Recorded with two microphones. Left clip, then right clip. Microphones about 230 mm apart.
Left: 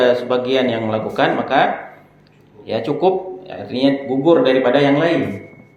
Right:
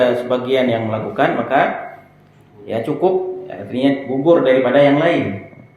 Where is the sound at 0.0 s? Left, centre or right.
Centre.